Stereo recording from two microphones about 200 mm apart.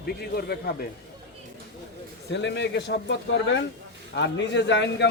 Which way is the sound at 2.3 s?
60° left (ahead or behind).